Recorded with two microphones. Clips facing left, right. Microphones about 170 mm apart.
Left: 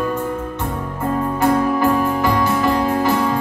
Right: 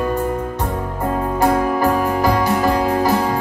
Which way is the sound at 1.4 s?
35° right (ahead or behind).